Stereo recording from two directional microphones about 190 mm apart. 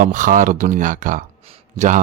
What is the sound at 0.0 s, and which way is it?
Speech, 45° right (ahead or behind).